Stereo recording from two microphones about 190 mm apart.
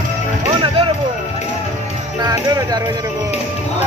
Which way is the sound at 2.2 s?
20° right (ahead or behind).